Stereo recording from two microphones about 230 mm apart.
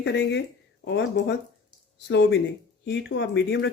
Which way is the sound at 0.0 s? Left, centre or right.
Left.